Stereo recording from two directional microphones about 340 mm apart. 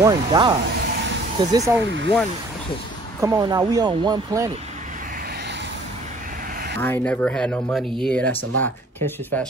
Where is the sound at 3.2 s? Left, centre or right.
Centre.